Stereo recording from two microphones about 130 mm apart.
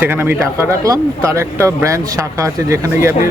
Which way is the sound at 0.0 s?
15° right (ahead or behind).